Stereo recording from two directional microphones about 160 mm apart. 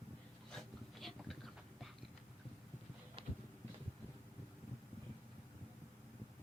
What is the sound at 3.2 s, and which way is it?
Clip-clop, 35° right (ahead or behind).